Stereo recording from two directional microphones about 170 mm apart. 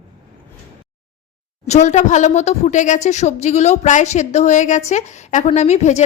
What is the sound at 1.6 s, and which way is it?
A woman's voice, 40° left (ahead or behind).